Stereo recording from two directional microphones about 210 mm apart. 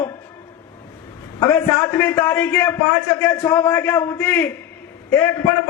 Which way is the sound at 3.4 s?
20° left (ahead or behind).